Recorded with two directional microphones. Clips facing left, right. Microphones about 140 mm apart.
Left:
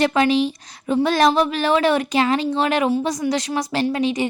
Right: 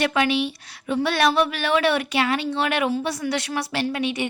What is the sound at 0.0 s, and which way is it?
A woman's voice, 30° left (ahead or behind).